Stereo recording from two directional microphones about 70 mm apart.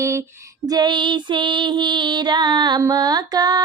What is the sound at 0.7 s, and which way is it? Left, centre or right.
Music, right.